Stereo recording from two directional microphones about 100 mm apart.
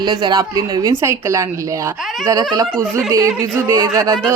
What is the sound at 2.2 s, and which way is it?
A woman's voice, 35° right (ahead or behind).